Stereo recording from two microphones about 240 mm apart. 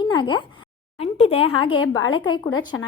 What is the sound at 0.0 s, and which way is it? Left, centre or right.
A woman's voice, centre.